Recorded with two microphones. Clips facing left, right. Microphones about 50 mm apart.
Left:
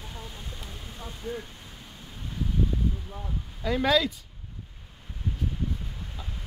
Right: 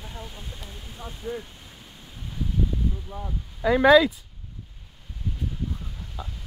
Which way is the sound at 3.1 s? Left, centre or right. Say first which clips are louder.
Right 2 dB; centre.